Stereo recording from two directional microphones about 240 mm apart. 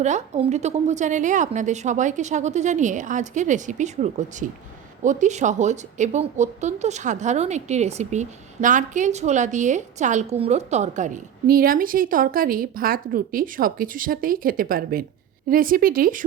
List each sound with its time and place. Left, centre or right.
0.0 s speech: right